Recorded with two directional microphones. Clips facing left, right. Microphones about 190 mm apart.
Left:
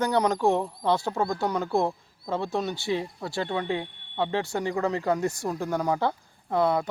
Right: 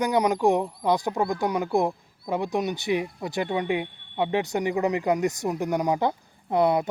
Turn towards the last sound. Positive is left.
turn(degrees=-20)  # may be behind; listen again after turning